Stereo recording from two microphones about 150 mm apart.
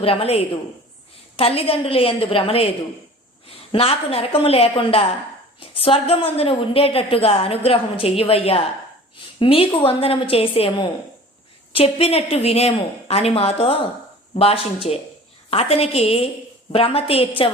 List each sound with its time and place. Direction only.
0.0 s a woman's voice: 40° left (ahead or behind)